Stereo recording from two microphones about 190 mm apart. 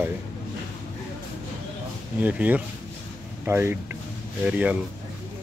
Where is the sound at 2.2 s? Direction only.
10° right (ahead or behind).